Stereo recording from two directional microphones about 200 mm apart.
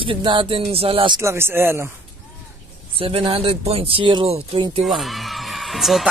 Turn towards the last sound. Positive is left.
turn(degrees=0)  # may be behind; listen again after turning